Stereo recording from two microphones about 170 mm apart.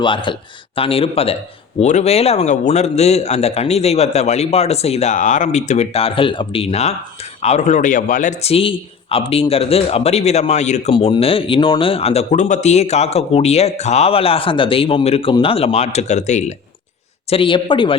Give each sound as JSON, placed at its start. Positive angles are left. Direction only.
{"t": 0.0, "sound": "a man's voice", "side_deg": 30}
{"t": 17.2, "sound": "a man's voice", "side_deg": 30}